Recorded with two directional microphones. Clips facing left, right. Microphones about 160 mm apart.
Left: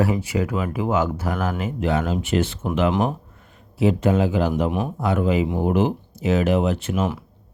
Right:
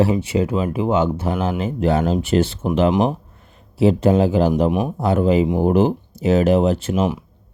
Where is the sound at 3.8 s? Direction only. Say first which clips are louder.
Right 4 dB; 35° right (ahead or behind).